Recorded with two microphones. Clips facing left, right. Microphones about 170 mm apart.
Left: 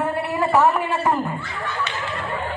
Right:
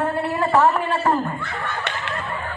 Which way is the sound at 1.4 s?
55° right (ahead or behind).